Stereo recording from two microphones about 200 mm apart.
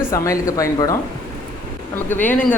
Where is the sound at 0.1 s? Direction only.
15° left (ahead or behind).